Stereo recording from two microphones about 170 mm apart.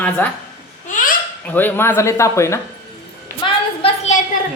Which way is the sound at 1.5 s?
10° left (ahead or behind).